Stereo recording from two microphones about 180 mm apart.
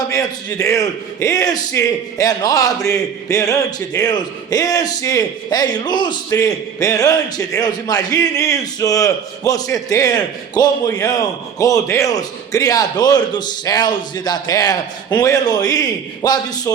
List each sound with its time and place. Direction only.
0.1 s a man's voice: 20° left (ahead or behind)